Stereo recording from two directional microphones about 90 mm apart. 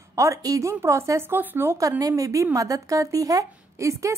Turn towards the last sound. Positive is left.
turn(degrees=-35)  # may be behind; listen again after turning